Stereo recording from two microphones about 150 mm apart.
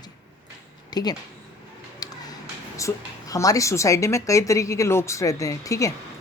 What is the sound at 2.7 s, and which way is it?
A woman's voice, 20° left (ahead or behind).